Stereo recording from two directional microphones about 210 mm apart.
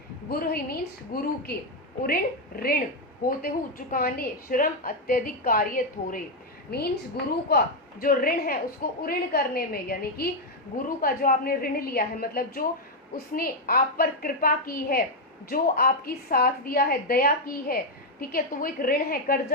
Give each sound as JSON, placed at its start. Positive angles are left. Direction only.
{"t": 0.3, "sound": "a woman's voice", "side_deg": 45}
{"t": 2.6, "sound": "a woman's voice", "side_deg": 45}